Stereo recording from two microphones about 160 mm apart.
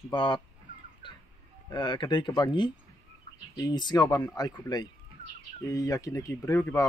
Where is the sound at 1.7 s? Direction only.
25° left (ahead or behind).